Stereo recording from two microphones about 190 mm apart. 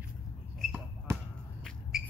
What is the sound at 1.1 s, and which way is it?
Basketball bounce, 15° right (ahead or behind).